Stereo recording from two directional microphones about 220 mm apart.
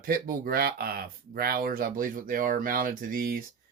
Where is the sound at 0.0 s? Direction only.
40° right (ahead or behind).